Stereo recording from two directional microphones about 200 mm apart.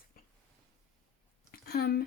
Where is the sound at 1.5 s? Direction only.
50° left (ahead or behind).